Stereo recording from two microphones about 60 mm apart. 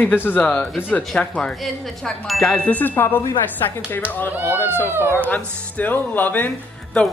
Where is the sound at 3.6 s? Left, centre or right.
Left.